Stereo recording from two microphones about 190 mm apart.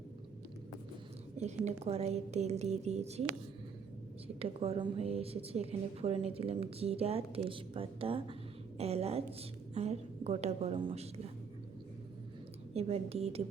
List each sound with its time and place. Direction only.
1.6 s a woman's voice: 35° right (ahead or behind)
4.4 s a woman's voice: 30° right (ahead or behind)
12.7 s a woman's voice: 30° right (ahead or behind)